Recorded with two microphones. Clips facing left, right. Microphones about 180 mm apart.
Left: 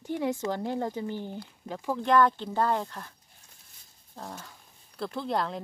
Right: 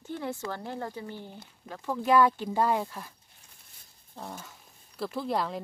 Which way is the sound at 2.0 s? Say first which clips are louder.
Right 1 dB; 10° right (ahead or behind).